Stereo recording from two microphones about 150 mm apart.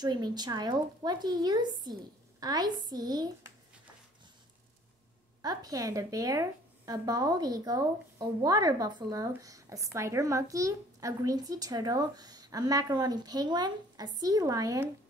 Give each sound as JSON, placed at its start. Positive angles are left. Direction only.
{"t": 0.0, "sound": "a woman's voice", "side_deg": -30}
{"t": 5.4, "sound": "a woman's voice", "side_deg": -25}